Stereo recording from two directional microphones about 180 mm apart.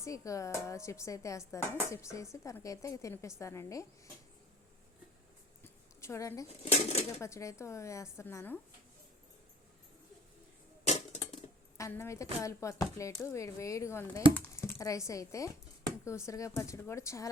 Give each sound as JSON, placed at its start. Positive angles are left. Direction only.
{"t": 0.0, "sound": "speech", "side_deg": 15}
{"t": 6.0, "sound": "speech", "side_deg": 15}
{"t": 6.7, "sound": "speech", "side_deg": 35}
{"t": 7.2, "sound": "speech", "side_deg": 15}
{"t": 10.8, "sound": "dishes", "side_deg": 40}
{"t": 11.8, "sound": "speech", "side_deg": 15}